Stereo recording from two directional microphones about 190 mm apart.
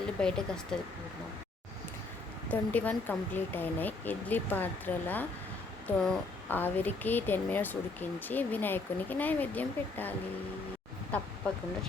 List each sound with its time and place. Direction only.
0.2 s speech: 5° left (ahead or behind)
2.5 s speech: 10° left (ahead or behind)